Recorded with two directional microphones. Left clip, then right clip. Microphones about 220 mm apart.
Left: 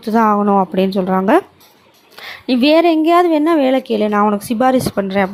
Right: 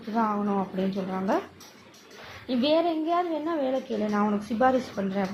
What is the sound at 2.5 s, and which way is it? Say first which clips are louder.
Speech: left 12 dB; 50° left (ahead or behind).